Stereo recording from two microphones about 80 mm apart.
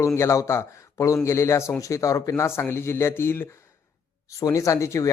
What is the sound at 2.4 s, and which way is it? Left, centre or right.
Speech, left.